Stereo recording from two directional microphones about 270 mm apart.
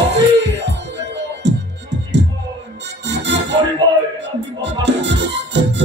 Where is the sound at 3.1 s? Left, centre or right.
Right.